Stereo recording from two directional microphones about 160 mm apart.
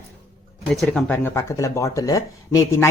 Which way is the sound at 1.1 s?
15° left (ahead or behind).